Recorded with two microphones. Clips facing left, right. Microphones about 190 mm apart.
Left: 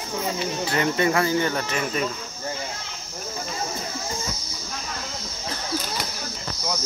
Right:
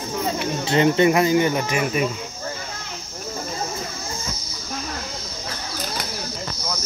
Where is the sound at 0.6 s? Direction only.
25° right (ahead or behind).